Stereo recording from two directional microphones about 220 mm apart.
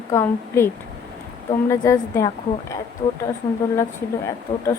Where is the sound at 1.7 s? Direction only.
15° left (ahead or behind).